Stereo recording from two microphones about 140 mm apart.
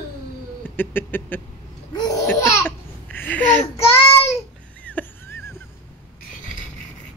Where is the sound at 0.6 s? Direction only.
15° left (ahead or behind).